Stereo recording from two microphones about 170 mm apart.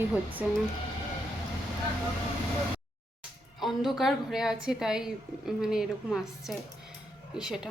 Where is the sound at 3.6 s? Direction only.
Centre (ahead or behind).